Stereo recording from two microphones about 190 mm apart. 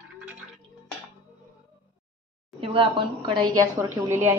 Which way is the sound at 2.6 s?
30° right (ahead or behind).